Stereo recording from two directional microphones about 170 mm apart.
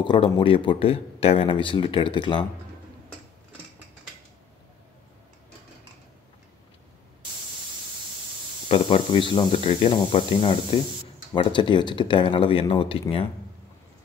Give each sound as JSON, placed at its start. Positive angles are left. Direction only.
{"t": 0.0, "sound": "speech", "side_deg": 30}
{"t": 8.6, "sound": "speech", "side_deg": 30}